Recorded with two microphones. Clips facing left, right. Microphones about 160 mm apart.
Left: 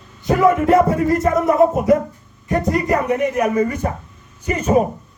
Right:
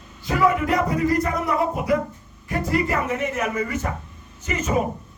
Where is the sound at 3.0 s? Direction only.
15° left (ahead or behind).